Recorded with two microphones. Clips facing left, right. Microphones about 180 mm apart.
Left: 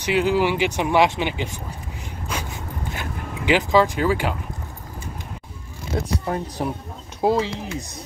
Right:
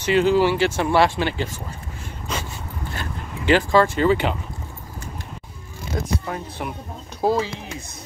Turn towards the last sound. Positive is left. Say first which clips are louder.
# left 1 dB
turn(degrees=25)  # may be behind; listen again after turning